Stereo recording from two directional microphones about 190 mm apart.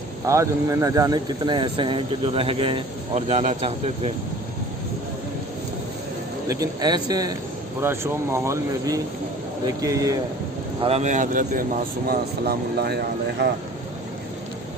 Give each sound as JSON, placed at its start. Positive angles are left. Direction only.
{"t": 0.3, "sound": "speech", "side_deg": -15}
{"t": 6.5, "sound": "speech", "side_deg": -20}
{"t": 10.8, "sound": "speech", "side_deg": -35}